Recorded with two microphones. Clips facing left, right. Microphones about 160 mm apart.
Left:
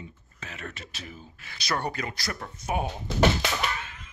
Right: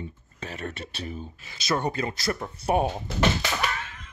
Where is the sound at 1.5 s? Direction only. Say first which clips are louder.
Right 4 dB; 20° right (ahead or behind).